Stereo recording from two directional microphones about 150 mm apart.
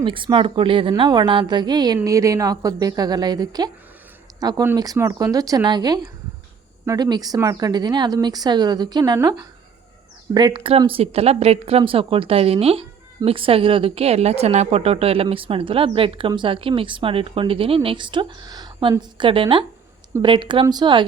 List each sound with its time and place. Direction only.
0.0 s a woman's voice: 35° right (ahead or behind)